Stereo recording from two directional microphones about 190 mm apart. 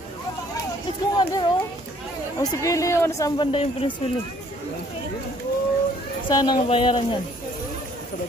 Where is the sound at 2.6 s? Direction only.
15° left (ahead or behind).